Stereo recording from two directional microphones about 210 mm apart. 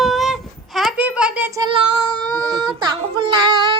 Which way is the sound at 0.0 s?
Centre (ahead or behind).